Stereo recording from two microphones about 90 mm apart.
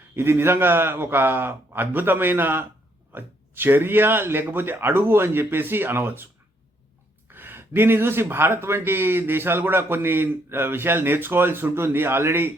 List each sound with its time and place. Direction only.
0.2 s speech: 30° right (ahead or behind)
7.3 s speech: 25° right (ahead or behind)